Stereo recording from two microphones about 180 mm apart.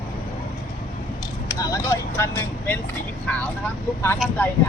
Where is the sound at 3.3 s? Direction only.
10° left (ahead or behind).